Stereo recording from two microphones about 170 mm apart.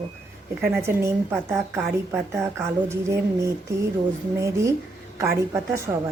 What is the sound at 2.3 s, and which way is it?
A woman's voice, 15° right (ahead or behind).